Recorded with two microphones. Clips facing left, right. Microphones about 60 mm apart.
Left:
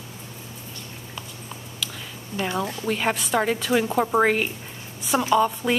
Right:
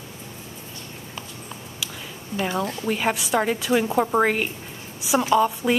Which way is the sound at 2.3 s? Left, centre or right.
Centre.